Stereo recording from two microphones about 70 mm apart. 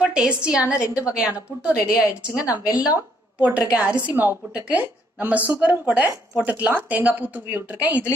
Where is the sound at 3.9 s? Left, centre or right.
Right.